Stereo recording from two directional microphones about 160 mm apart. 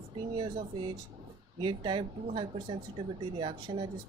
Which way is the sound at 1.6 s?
30° right (ahead or behind).